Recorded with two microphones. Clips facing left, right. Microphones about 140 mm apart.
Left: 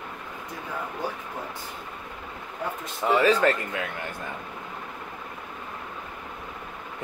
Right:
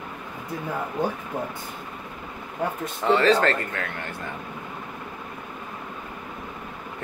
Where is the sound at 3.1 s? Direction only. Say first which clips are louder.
Right 1 dB; 10° left (ahead or behind).